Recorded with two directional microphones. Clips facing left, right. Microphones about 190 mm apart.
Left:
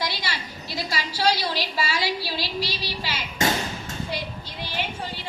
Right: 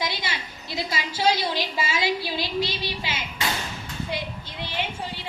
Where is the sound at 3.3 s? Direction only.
45° left (ahead or behind).